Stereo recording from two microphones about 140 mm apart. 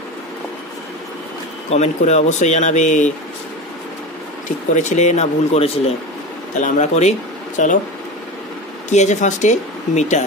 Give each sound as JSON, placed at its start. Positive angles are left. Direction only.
{"t": 1.7, "sound": "speech", "side_deg": 55}
{"t": 4.7, "sound": "speech", "side_deg": 60}
{"t": 6.5, "sound": "speech", "side_deg": 60}
{"t": 8.9, "sound": "speech", "side_deg": 55}